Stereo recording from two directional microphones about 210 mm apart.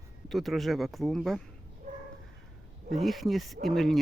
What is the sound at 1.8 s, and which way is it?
Dog, 35° right (ahead or behind).